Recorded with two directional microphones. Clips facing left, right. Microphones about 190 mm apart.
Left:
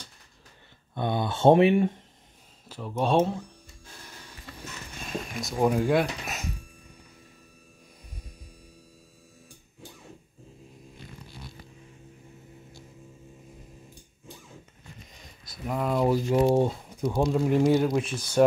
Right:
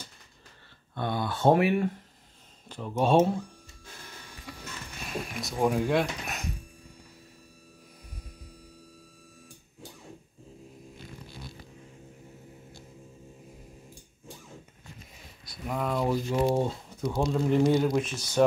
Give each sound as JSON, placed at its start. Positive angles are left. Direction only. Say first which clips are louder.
{"t": 0.9, "sound": "speech", "louder": "left 2 dB", "side_deg": 20}
{"t": 2.7, "sound": "speech", "louder": "right 1 dB", "side_deg": 0}
{"t": 4.5, "sound": "a sound", "louder": "right 2 dB", "side_deg": -10}
{"t": 5.4, "sound": "speech", "louder": "left 2 dB", "side_deg": 0}
{"t": 15.1, "sound": "speech", "louder": "left 1 dB", "side_deg": 0}